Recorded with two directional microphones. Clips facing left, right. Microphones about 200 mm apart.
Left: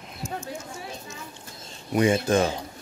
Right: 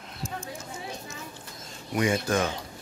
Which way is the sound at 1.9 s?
25° left (ahead or behind).